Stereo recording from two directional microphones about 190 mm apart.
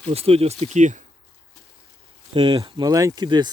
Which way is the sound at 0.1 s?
30° right (ahead or behind).